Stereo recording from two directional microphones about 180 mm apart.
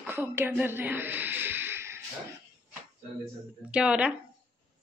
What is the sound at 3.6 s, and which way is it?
Speech, 5° right (ahead or behind).